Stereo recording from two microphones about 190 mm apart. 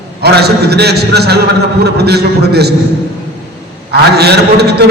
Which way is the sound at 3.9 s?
60° right (ahead or behind).